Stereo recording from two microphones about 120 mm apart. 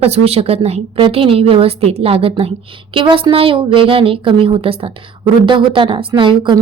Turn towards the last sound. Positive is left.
turn(degrees=-45)  # may be behind; listen again after turning